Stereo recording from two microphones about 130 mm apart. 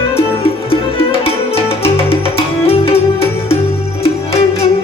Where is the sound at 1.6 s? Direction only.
20° left (ahead or behind).